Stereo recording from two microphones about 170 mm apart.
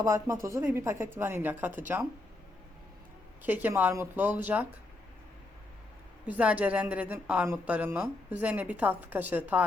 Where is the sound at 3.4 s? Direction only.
10° right (ahead or behind).